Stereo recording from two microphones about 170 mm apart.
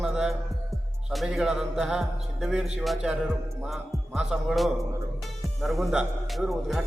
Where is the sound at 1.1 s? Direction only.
Centre (ahead or behind).